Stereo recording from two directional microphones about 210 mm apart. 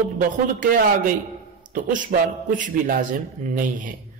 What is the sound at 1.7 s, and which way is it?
A man's voice, 40° right (ahead or behind).